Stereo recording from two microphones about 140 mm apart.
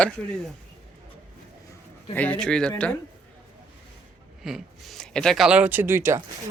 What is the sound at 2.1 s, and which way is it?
Speech, 10° left (ahead or behind).